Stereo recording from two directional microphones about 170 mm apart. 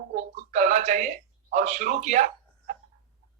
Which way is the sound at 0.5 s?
45° right (ahead or behind).